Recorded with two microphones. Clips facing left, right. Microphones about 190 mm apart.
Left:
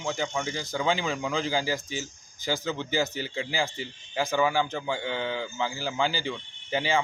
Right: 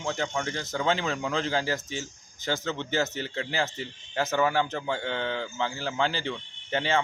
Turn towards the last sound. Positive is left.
turn(degrees=0)  # may be behind; listen again after turning